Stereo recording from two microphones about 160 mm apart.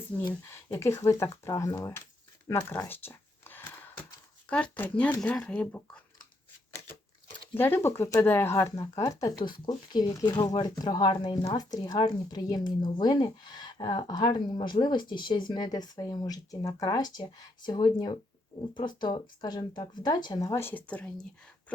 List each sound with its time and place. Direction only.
0.3 s speech: 15° left (ahead or behind)
2.5 s a sound: 15° left (ahead or behind)
4.4 s speech: 10° left (ahead or behind)
7.5 s speech: 15° left (ahead or behind)